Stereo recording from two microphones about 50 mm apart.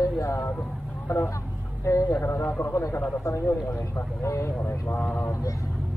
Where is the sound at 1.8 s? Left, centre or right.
Left.